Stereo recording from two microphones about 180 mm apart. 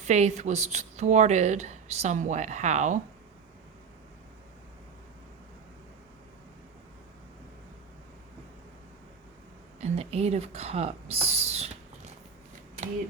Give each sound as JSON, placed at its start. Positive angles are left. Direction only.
{"t": 0.0, "sound": "speech", "side_deg": -40}
{"t": 9.8, "sound": "speech", "side_deg": -35}